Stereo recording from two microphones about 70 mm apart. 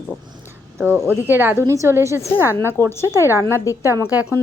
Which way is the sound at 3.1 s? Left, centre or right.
Right.